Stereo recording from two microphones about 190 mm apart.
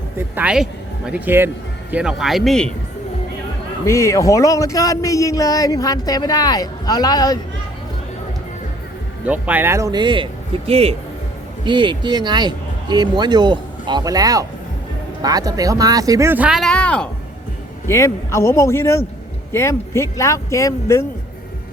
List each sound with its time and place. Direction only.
0.3 s speech: 5° right (ahead or behind)
3.8 s a man's voice: 15° left (ahead or behind)
9.2 s speech: 10° right (ahead or behind); by 21.0 s 15° left (ahead or behind)